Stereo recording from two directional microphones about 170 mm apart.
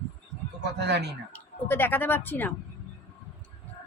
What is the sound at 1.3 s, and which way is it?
Speech, 10° left (ahead or behind).